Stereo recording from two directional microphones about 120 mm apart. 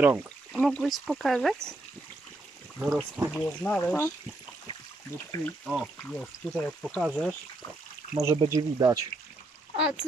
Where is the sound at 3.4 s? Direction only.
15° left (ahead or behind).